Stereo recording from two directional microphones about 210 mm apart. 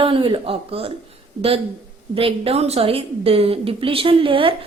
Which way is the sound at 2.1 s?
25° right (ahead or behind).